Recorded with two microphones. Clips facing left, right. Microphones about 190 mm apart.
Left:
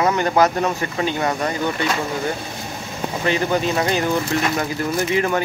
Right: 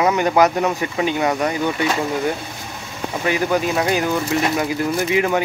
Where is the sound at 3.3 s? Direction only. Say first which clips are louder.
Right 1 dB; 10° right (ahead or behind).